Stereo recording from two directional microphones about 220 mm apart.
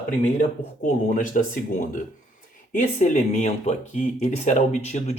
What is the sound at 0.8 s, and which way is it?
Speech, 35° left (ahead or behind).